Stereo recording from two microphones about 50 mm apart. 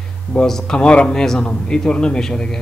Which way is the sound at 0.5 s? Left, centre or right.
Centre.